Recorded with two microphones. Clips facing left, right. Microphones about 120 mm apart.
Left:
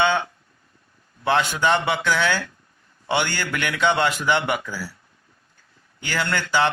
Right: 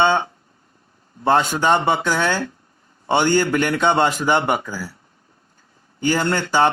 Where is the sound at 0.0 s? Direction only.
40° right (ahead or behind).